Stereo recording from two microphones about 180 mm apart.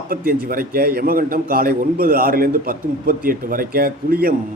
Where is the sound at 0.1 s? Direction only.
55° right (ahead or behind).